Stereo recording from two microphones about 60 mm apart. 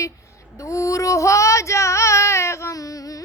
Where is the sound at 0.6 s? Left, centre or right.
Left.